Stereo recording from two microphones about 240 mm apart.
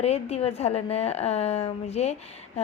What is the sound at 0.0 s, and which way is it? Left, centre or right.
A woman's voice, left.